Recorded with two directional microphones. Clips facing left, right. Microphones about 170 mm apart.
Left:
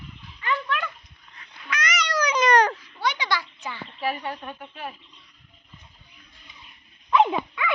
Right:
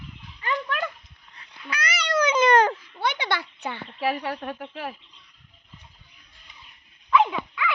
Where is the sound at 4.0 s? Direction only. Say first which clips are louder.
Right 2 dB; 90° right.